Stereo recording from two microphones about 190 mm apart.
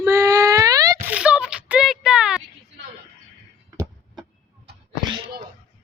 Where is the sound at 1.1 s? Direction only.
5° right (ahead or behind).